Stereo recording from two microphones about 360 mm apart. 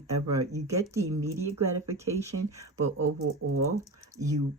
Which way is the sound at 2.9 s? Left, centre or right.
Right.